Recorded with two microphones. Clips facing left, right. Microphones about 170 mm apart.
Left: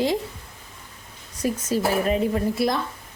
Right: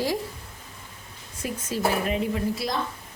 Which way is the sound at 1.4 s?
40° left (ahead or behind).